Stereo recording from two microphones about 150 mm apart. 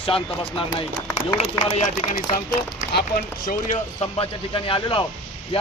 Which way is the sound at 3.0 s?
90° left.